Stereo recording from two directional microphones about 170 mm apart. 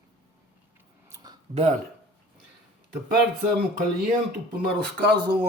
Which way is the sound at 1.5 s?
45° right (ahead or behind).